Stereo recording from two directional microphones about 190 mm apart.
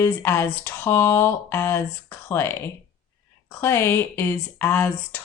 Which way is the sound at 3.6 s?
15° left (ahead or behind).